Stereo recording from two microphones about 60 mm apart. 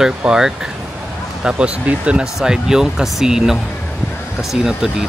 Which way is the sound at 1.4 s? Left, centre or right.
Centre.